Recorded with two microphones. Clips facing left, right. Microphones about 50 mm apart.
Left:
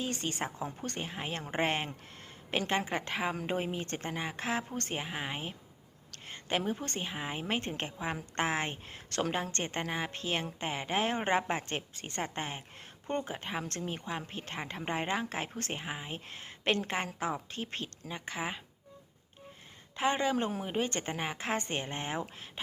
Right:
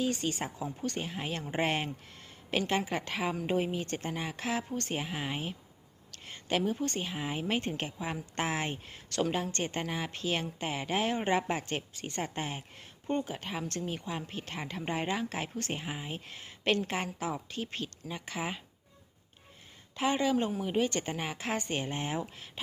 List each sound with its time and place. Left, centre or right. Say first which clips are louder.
0.0 s a woman's voice: right 3 dB; left
0.9 s a woman's voice: right 2 dB; left
4.9 s a woman's voice: right 2 dB; left
15.7 s speech: right 1 dB; centre
16.0 s a woman's voice: right 1 dB; left
18.1 s speech: even; left
20.0 s a woman's voice: right 1 dB; left